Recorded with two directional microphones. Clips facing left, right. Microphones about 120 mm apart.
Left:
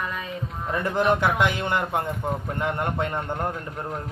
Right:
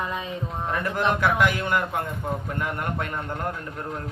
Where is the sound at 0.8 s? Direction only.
25° left (ahead or behind).